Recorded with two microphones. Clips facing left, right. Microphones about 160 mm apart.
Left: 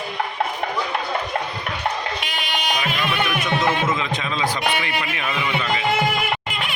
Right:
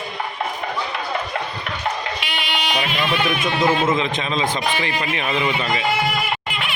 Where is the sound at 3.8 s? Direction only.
25° right (ahead or behind).